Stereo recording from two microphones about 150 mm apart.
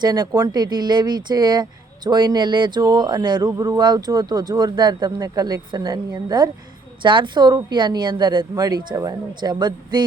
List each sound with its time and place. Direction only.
0.0 s speech: 25° right (ahead or behind)